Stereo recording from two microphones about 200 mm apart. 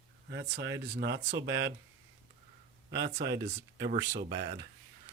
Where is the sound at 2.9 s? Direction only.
55° right (ahead or behind).